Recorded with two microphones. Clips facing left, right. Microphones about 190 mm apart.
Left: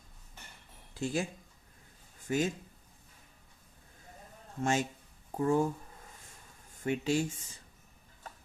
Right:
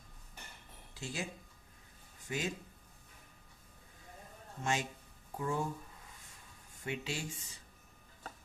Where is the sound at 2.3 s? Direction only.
45° left (ahead or behind).